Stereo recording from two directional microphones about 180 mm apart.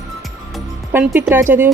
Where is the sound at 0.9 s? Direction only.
10° right (ahead or behind).